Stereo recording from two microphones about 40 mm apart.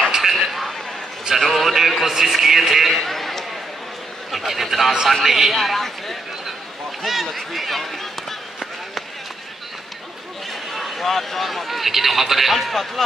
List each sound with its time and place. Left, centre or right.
0.0 s vehicle: centre
1.4 s a man's voice: centre
7.2 s a man's voice: centre
10.7 s a man's voice: centre